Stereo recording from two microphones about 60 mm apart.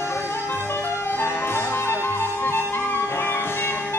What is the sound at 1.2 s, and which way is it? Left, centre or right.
Music, left.